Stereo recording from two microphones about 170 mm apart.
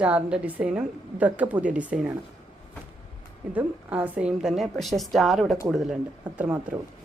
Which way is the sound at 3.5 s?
10° right (ahead or behind).